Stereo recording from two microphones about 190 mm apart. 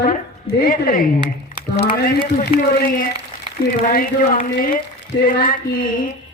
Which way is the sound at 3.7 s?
50° left (ahead or behind).